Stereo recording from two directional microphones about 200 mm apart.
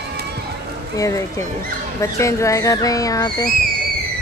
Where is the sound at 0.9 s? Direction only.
15° left (ahead or behind).